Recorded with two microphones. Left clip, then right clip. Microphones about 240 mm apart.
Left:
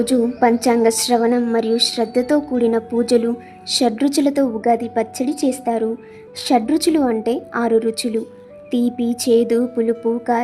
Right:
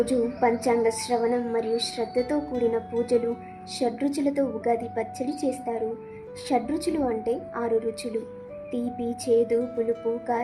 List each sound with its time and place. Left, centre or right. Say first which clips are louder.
0.0 s a woman's voice: left 7 dB; left